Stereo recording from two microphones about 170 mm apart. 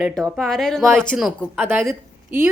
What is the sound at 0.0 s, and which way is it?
Speech, centre (ahead or behind).